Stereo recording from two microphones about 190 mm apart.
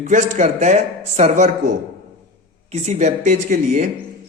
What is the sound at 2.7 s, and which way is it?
A man's voice, 35° right (ahead or behind).